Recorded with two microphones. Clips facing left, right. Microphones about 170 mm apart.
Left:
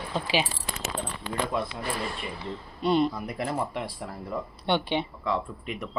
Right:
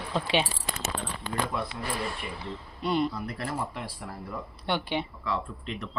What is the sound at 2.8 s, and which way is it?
Speech, 20° left (ahead or behind).